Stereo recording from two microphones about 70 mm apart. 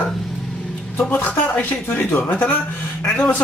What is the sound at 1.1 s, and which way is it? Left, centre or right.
Speech, left.